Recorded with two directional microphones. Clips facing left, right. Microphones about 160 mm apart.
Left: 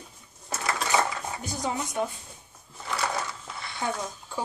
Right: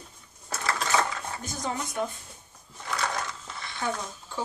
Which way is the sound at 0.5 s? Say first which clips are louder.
Left 1 dB; 15° left (ahead or behind).